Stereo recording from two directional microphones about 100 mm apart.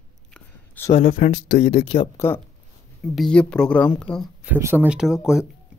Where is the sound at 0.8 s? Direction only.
90° left.